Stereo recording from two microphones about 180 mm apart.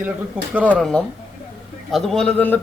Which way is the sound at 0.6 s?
5° right (ahead or behind).